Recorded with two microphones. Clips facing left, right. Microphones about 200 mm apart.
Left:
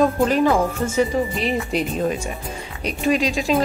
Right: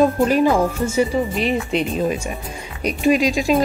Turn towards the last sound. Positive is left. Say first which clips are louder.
# right 3 dB
turn(degrees=-10)  # may be behind; listen again after turning